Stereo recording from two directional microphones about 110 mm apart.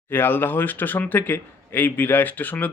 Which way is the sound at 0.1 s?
20° left (ahead or behind).